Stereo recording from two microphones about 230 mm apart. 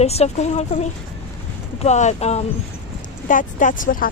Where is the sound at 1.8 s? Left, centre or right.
Left.